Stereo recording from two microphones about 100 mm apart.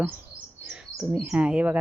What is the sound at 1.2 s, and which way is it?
Speech, 15° right (ahead or behind).